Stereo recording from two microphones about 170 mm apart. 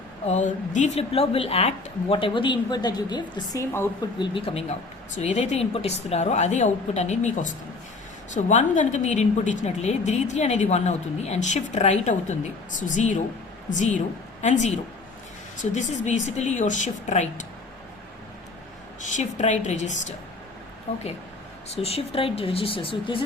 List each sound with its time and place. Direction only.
0.3 s speech: 45° left (ahead or behind)
5.1 s a woman's voice: 40° left (ahead or behind)
19.1 s a woman's voice: 45° left (ahead or behind)